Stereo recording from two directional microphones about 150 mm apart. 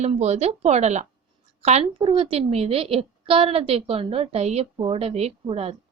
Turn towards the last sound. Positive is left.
turn(degrees=-40)  # may be behind; listen again after turning